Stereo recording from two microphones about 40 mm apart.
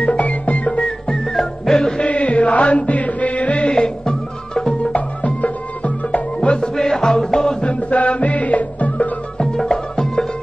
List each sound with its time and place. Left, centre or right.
0.0 s music: left; by 2.0 s centre
2.0 s chant: left
3.7 s music: centre
4.7 s music: left
6.5 s music: centre
7.7 s music: left
9.7 s music: centre